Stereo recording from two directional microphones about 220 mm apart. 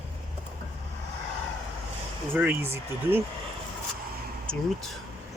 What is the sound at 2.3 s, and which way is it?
Speech, 10° right (ahead or behind).